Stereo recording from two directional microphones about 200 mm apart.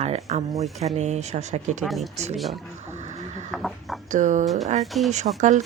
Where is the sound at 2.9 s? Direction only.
35° right (ahead or behind).